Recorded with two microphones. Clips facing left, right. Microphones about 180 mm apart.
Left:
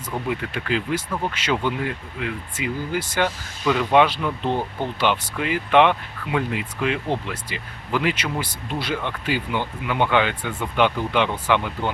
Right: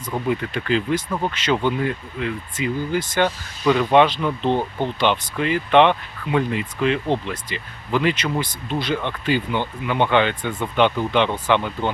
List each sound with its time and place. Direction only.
0.3 s speech: 5° left (ahead or behind)
4.4 s speech: 20° right (ahead or behind)
4.9 s speech: 10° left (ahead or behind)